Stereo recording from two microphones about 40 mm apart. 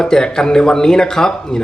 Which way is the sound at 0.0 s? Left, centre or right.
Centre.